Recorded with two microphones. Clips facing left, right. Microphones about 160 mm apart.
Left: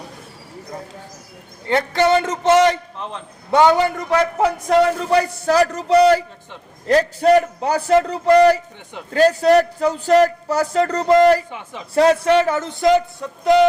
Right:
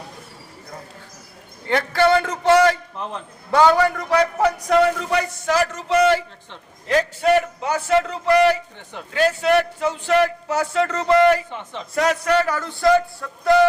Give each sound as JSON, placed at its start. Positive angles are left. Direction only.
{"t": 1.6, "sound": "a man's voice", "side_deg": 20}
{"t": 11.5, "sound": "a man's voice", "side_deg": 10}
{"t": 11.9, "sound": "speech", "side_deg": 30}